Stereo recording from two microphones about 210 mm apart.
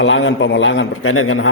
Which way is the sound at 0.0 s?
60° left (ahead or behind).